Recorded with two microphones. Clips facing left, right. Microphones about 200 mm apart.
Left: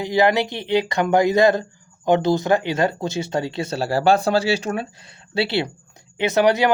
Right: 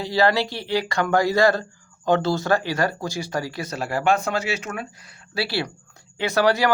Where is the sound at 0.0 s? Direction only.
20° left (ahead or behind).